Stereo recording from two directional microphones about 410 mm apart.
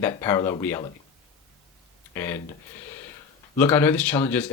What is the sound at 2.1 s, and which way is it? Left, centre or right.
Speech, centre.